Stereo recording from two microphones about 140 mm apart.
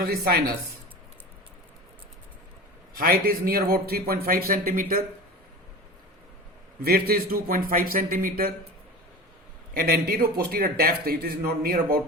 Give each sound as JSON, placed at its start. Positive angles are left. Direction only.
{"t": 0.0, "sound": "a man's voice", "side_deg": -90}
{"t": 2.9, "sound": "a man's voice", "side_deg": -90}
{"t": 6.8, "sound": "a man's voice", "side_deg": -90}
{"t": 9.7, "sound": "a man's voice", "side_deg": -90}